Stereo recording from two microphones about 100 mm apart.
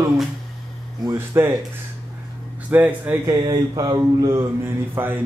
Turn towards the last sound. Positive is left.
turn(degrees=-20)  # may be behind; listen again after turning